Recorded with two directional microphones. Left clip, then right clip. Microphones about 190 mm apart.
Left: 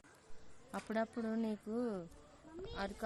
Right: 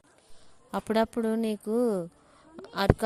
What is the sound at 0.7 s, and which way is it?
A woman's voice, 40° right (ahead or behind).